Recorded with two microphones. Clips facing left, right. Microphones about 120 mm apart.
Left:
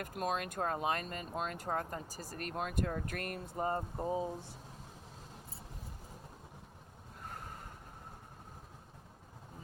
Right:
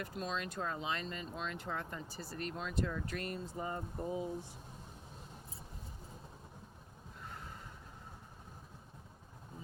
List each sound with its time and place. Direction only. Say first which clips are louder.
0.0 s speech: left 4 dB; 55° left (ahead or behind)
3.7 s speech: left 5 dB; 40° left (ahead or behind)
7.2 s snort: left 2 dB; 45° left (ahead or behind)